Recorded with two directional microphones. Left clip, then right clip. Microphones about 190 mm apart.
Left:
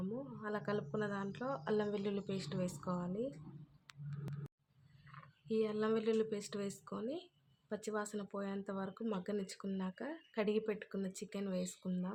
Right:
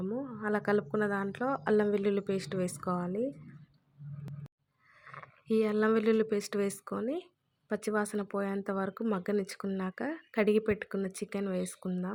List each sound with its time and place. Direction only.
0.1 s speech: 40° right (ahead or behind)
5.1 s speech: 40° right (ahead or behind)